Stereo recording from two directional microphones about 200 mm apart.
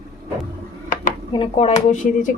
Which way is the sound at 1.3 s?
30° left (ahead or behind).